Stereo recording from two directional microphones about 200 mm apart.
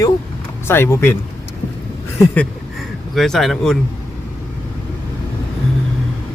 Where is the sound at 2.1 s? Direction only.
10° left (ahead or behind).